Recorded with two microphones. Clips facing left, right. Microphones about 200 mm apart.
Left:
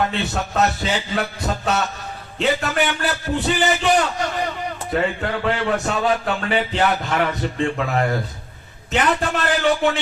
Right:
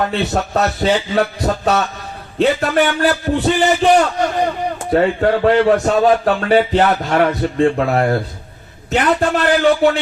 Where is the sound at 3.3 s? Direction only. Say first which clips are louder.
Right 5 dB; 35° right (ahead or behind).